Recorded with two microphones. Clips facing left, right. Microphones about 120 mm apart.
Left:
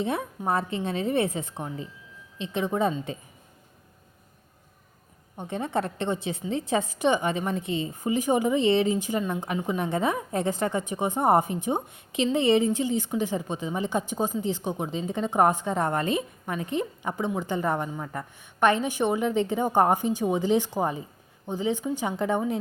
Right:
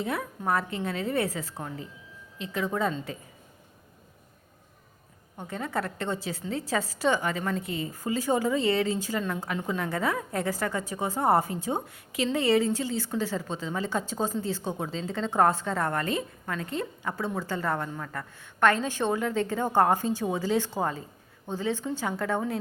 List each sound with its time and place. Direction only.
0.0 s a woman's voice: 25° left (ahead or behind)
5.4 s a woman's voice: 20° left (ahead or behind)